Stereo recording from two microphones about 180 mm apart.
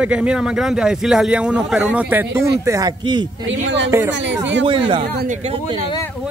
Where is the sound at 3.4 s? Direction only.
75° right (ahead or behind).